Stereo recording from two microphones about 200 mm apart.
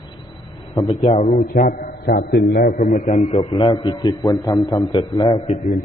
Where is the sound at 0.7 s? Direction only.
25° left (ahead or behind).